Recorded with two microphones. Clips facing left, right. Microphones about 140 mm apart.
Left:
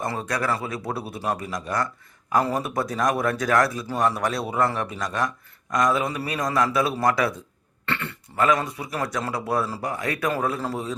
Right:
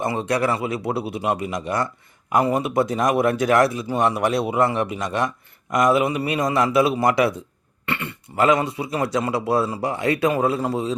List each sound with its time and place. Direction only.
0.0 s a man's voice: 20° right (ahead or behind)
4.4 s a man's voice: 15° right (ahead or behind)
8.4 s a man's voice: 25° right (ahead or behind)